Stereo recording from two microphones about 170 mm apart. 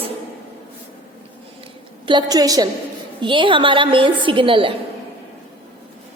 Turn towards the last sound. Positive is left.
turn(degrees=-30)  # may be behind; listen again after turning